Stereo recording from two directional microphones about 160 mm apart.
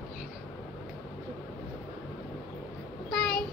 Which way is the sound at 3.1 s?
Centre (ahead or behind).